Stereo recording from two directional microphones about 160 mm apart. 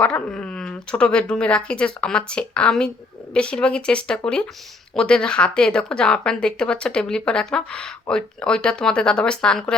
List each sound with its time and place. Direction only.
0.0 s a woman's voice: 5° left (ahead or behind)